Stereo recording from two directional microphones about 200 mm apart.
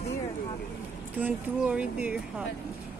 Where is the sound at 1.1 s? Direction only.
5° right (ahead or behind).